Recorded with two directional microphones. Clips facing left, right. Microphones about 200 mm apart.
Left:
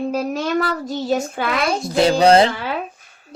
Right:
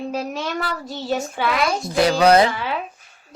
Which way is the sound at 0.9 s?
40° left (ahead or behind).